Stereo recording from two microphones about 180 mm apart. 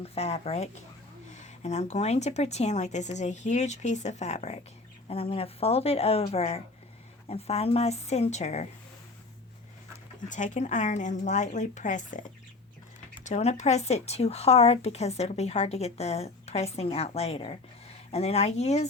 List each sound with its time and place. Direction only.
0.0 s speech: 35° left (ahead or behind)
10.2 s speech: 45° left (ahead or behind)
13.2 s speech: 40° left (ahead or behind)